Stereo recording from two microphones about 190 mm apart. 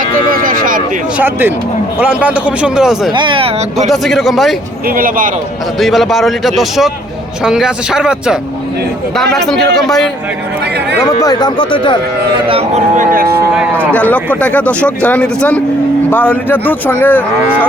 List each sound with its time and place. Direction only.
0.0 s a sound: 50° right (ahead or behind)
1.2 s a man's voice: 10° right (ahead or behind)
3.1 s speech: 25° right (ahead or behind)
3.8 s a man's voice: centre (ahead or behind)
4.9 s speech: 45° right (ahead or behind)
5.8 s a man's voice: centre (ahead or behind)
11.0 s speech: 20° left (ahead or behind)
12.5 s speech: 30° right (ahead or behind)
13.0 s speech: 50° right (ahead or behind)
13.9 s speech: 10° left (ahead or behind)